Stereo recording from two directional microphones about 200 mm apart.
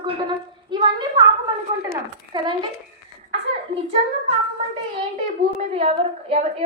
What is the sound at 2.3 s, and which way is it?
A woman's voice, 25° right (ahead or behind).